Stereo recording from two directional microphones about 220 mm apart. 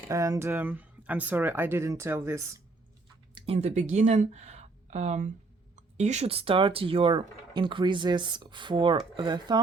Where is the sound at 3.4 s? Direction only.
25° right (ahead or behind).